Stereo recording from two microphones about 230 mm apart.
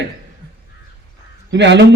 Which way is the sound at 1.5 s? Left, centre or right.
Right.